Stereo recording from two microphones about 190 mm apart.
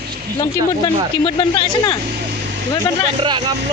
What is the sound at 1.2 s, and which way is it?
Speech, 25° left (ahead or behind).